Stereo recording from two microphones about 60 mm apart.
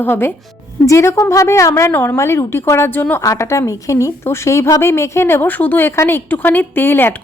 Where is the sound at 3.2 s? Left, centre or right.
Left.